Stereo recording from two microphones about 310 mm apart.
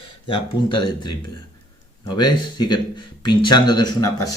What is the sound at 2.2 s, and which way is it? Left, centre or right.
Speech, centre.